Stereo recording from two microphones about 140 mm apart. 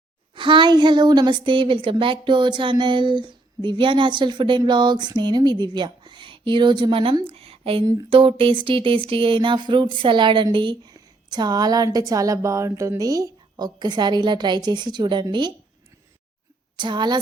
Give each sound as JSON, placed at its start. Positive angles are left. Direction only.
{"t": 0.3, "sound": "a woman's voice", "side_deg": -35}
{"t": 16.7, "sound": "a woman's voice", "side_deg": -35}